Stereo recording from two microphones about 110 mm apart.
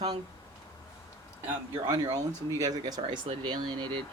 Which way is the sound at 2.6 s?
35° right (ahead or behind).